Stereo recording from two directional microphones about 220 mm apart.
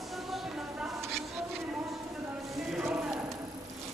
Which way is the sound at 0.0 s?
Centre (ahead or behind).